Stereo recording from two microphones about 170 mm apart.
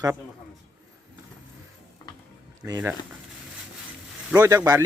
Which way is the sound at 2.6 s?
15° right (ahead or behind).